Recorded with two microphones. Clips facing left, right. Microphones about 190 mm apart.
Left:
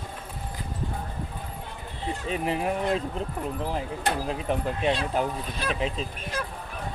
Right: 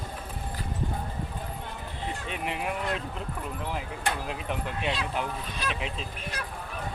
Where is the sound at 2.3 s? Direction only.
35° left (ahead or behind).